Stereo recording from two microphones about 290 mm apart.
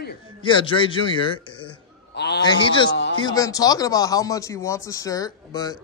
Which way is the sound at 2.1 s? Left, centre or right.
Left.